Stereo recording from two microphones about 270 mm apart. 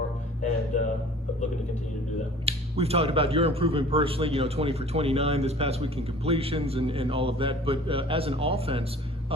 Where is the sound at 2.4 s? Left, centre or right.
Right.